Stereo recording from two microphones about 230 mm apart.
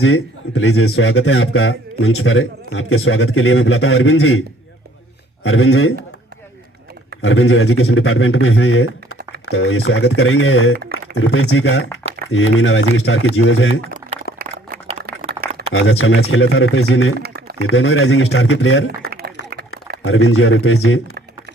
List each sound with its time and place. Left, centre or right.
0.0 s speech: left
7.2 s speech: left
14.3 s a sound: left
14.8 s a sound: right
15.7 s speech: left
17.2 s speech: right
17.7 s speech: left